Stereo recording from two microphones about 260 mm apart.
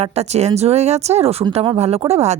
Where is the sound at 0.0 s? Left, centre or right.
Right.